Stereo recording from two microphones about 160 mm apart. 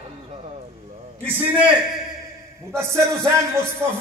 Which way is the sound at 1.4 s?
10° right (ahead or behind).